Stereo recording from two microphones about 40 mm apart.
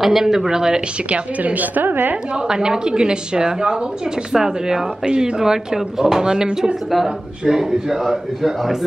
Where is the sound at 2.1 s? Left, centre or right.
Right.